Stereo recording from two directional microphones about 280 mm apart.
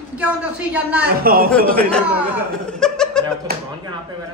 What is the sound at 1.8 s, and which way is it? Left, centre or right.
Speech, centre.